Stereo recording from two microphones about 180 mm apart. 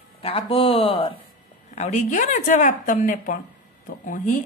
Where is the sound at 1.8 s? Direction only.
40° left (ahead or behind).